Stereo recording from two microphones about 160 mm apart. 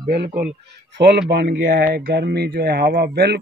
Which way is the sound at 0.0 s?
85° right.